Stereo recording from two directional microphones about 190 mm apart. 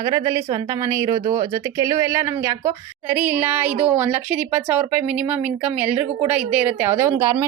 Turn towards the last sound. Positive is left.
turn(degrees=-15)  # may be behind; listen again after turning